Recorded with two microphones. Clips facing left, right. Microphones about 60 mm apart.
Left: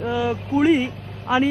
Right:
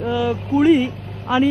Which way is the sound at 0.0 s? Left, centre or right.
Left.